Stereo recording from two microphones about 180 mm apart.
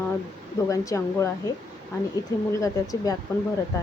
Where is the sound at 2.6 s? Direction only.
20° left (ahead or behind).